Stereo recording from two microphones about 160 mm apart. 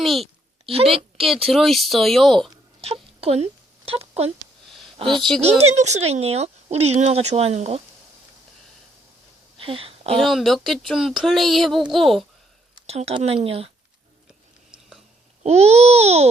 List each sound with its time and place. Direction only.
0.0 s speech: centre (ahead or behind)
0.6 s a woman's voice: 35° right (ahead or behind)
1.1 s speech: centre (ahead or behind)
2.8 s a sound: 40° right (ahead or behind)
4.9 s a woman's voice: 30° right (ahead or behind)
9.6 s a sound: 35° right (ahead or behind)
10.2 s speech: centre (ahead or behind)
12.9 s babbling: 40° right (ahead or behind)
14.7 s a sound: 5° right (ahead or behind)
15.4 s babbling: 40° right (ahead or behind)